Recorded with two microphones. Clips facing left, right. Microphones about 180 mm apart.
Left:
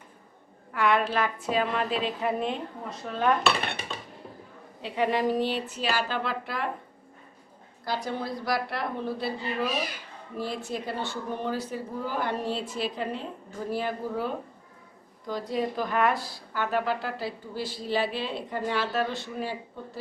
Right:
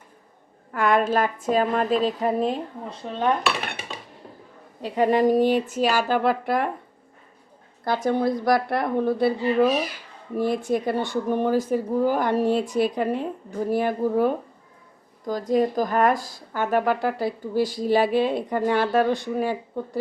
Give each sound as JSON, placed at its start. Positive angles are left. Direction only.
{"t": 0.7, "sound": "a woman's voice", "side_deg": -45}
{"t": 4.8, "sound": "a woman's voice", "side_deg": -45}
{"t": 7.9, "sound": "a woman's voice", "side_deg": -50}